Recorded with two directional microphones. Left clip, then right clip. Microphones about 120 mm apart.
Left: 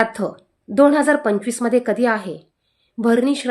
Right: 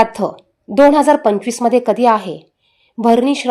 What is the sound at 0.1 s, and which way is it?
A woman's voice, 20° right (ahead or behind).